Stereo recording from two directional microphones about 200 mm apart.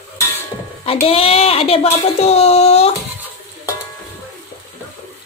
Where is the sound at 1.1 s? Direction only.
30° left (ahead or behind).